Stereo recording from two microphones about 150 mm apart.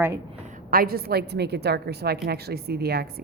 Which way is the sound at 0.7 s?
80° right.